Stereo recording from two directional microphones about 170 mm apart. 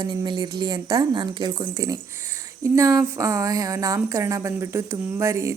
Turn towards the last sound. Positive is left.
turn(degrees=-15)  # may be behind; listen again after turning